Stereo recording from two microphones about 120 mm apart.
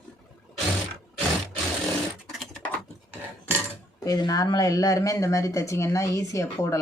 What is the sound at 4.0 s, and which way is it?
Speech, 30° left (ahead or behind).